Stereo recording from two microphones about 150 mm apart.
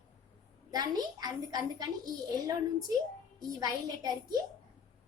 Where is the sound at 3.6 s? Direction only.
25° right (ahead or behind).